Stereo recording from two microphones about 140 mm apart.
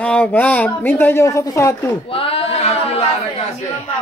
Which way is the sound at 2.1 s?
40° left (ahead or behind).